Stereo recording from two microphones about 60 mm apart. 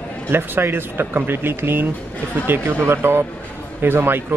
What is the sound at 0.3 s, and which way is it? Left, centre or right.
A man's voice, right.